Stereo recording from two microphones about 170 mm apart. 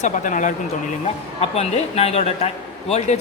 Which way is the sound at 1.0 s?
40° left (ahead or behind).